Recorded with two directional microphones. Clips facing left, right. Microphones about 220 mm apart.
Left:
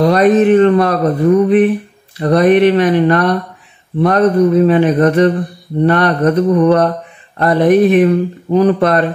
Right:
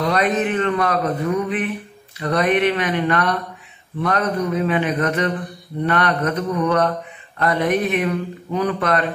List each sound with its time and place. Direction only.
0.0 s speech: 40° left (ahead or behind)